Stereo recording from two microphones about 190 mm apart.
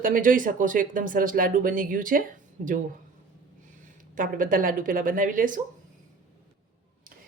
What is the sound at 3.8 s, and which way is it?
Speech, 45° right (ahead or behind).